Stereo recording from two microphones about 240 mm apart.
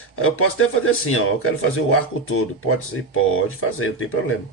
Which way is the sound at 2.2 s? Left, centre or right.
Left.